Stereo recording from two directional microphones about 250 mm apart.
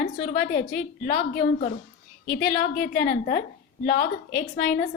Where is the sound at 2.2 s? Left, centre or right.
Left.